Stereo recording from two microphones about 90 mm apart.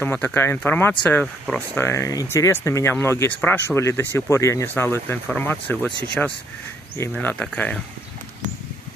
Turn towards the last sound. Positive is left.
turn(degrees=15)  # may be behind; listen again after turning